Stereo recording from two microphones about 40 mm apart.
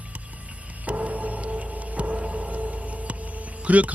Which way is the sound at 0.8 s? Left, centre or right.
Right.